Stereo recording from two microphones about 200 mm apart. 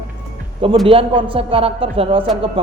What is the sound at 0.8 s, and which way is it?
A man's voice, 25° right (ahead or behind).